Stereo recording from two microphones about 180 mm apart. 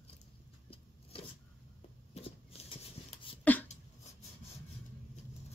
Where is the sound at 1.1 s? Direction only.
30° left (ahead or behind).